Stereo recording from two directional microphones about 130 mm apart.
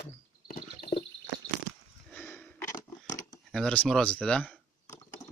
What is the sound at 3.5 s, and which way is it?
Speech, 10° left (ahead or behind).